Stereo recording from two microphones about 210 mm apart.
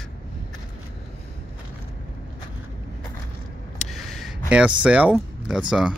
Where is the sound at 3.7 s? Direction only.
Centre (ahead or behind).